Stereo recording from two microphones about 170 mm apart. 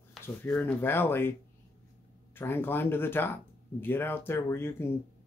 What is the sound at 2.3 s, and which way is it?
Speech, 10° left (ahead or behind).